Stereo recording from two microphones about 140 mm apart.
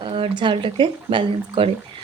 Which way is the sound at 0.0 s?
35° right (ahead or behind).